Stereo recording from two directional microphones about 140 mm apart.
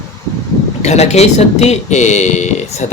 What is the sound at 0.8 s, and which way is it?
Speech, 55° left (ahead or behind).